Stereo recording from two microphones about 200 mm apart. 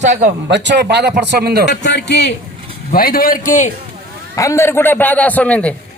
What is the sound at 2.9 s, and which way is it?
Speech, 45° left (ahead or behind).